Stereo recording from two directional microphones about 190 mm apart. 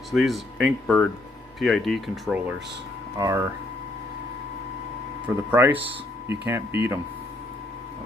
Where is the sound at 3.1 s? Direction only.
15° right (ahead or behind).